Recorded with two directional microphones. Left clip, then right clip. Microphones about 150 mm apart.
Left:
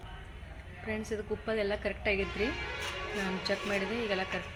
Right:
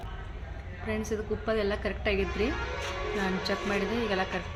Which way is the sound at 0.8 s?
15° left (ahead or behind).